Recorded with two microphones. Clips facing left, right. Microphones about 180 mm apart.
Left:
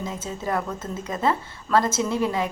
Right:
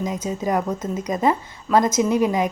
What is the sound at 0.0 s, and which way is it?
A woman's voice, 15° right (ahead or behind).